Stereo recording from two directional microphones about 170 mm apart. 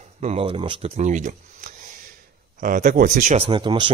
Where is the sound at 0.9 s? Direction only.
45° right (ahead or behind).